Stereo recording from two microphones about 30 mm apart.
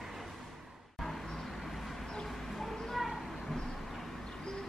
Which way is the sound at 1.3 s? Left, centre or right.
Centre.